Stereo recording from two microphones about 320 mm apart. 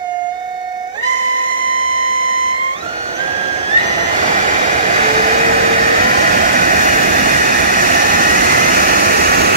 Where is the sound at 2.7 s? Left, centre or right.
Centre.